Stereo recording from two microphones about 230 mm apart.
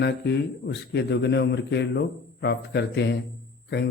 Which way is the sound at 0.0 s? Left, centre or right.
Left.